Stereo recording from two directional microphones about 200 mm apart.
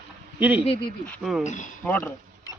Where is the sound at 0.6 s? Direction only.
30° left (ahead or behind).